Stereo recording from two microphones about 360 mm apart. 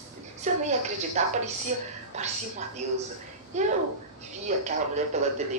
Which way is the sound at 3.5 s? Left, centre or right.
Centre.